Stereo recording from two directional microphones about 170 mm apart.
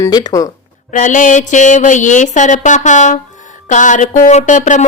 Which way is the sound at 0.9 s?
50° left (ahead or behind).